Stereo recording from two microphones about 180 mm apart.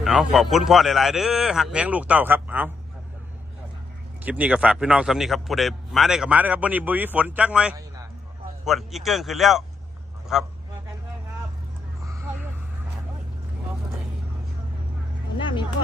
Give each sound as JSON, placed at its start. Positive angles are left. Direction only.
{"t": 0.0, "sound": "a man's voice", "side_deg": 0}
{"t": 4.2, "sound": "a man's voice", "side_deg": -10}
{"t": 12.0, "sound": "a sound", "side_deg": -10}
{"t": 15.4, "sound": "speech", "side_deg": 25}